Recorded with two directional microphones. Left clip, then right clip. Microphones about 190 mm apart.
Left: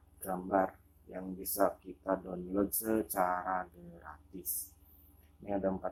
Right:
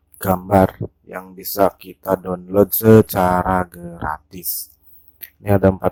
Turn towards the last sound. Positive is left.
turn(degrees=-50)  # may be behind; listen again after turning